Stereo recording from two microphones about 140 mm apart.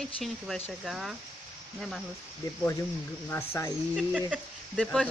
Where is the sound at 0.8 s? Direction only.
Centre (ahead or behind).